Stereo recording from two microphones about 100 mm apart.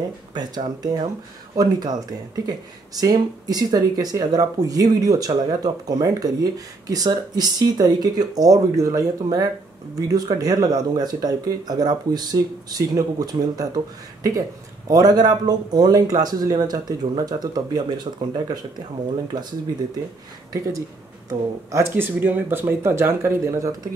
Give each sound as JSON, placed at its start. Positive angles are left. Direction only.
{"t": 0.3, "sound": "speech", "side_deg": -45}
{"t": 14.9, "sound": "speech", "side_deg": -40}
{"t": 21.3, "sound": "speech", "side_deg": -30}